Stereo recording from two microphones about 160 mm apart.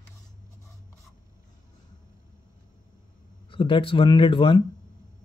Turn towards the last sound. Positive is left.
turn(degrees=30)  # may be behind; listen again after turning